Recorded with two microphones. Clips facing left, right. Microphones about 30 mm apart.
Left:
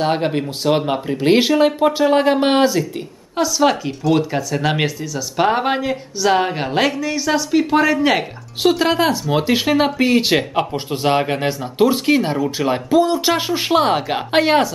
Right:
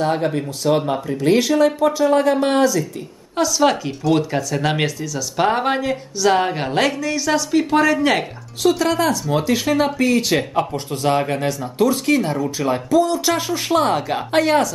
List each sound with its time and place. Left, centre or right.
0.0 s speech: left
3.3 s speech: centre
8.6 s speech: left